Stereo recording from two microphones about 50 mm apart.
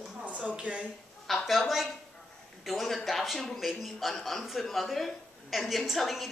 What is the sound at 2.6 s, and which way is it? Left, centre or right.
A man's voice, centre.